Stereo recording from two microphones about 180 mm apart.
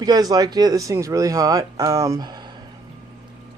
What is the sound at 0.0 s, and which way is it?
A man's voice, 20° right (ahead or behind).